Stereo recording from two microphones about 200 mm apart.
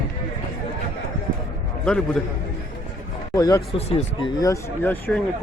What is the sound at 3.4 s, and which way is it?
Speech, 20° left (ahead or behind).